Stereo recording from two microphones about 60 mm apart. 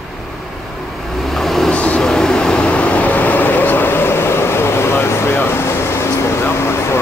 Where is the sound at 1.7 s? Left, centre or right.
Left.